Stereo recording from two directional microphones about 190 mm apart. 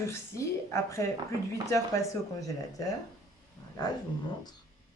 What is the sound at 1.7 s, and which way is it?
Speech, 20° left (ahead or behind).